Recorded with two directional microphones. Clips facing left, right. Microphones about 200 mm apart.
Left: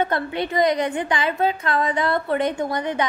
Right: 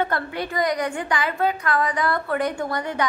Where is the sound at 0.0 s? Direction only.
20° left (ahead or behind).